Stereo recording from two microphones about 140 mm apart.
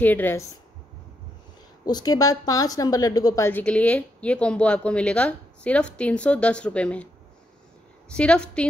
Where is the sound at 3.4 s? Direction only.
10° left (ahead or behind).